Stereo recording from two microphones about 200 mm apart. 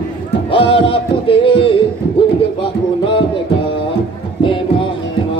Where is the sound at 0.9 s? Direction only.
25° left (ahead or behind).